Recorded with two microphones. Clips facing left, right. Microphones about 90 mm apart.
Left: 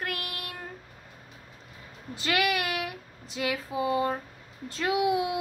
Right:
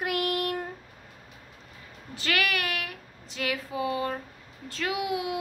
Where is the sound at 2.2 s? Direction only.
20° left (ahead or behind).